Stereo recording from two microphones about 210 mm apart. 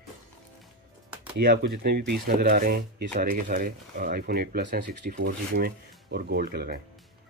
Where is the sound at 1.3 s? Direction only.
45° right (ahead or behind).